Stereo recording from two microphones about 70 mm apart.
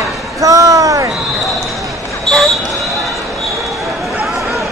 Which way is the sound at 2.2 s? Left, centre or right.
Centre.